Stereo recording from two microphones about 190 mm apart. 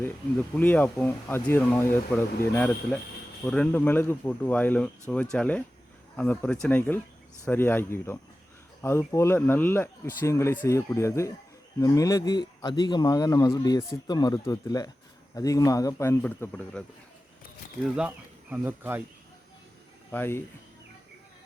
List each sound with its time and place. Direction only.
0.5 s speech: 10° left (ahead or behind)
17.8 s speech: 5° right (ahead or behind)
20.1 s speech: 10° left (ahead or behind)